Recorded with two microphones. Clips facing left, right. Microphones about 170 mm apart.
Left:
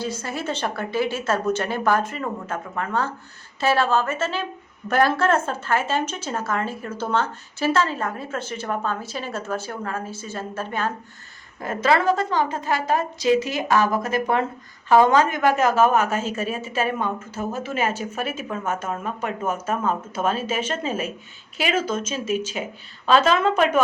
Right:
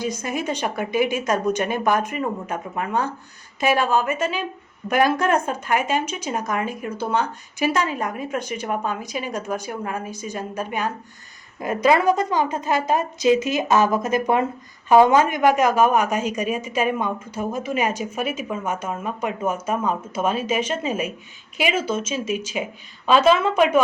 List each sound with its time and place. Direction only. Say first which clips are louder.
0.0 s a woman's voice: right 2 dB; 15° right (ahead or behind)